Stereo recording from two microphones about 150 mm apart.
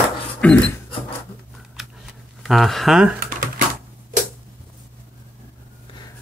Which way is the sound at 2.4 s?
Centre (ahead or behind).